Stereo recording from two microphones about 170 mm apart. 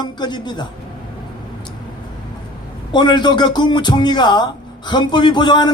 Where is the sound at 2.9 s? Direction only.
25° left (ahead or behind).